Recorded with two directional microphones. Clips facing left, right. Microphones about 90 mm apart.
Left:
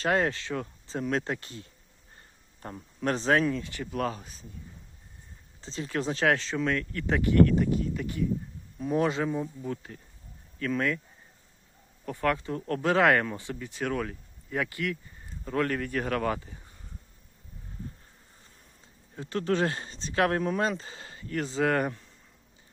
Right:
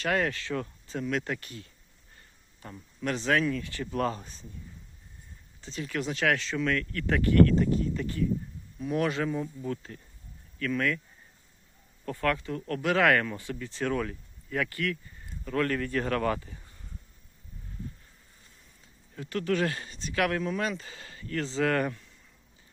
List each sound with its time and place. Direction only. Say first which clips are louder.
0.0 s speech: left 2 dB; 25° left (ahead or behind)
2.6 s speech: left 3 dB; 45° left (ahead or behind); by 3.8 s 20° left (ahead or behind)
3.9 s speech: right 1 dB; centre (ahead or behind)
5.5 s speech: left 1 dB; 30° left (ahead or behind); by 8.2 s 10° left (ahead or behind)
8.8 s speech: left 2 dB; 30° left (ahead or behind); by 10.0 s 15° left (ahead or behind)
10.6 s speech: even; 25° left (ahead or behind)
12.0 s speech: left 1 dB; 20° left (ahead or behind)
14.5 s speech: even; 20° left (ahead or behind)
16.4 s speech: even; 20° left (ahead or behind)
19.1 s speech: left 1 dB; 25° left (ahead or behind)